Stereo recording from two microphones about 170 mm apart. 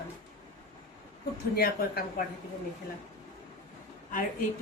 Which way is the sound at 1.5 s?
65° left (ahead or behind).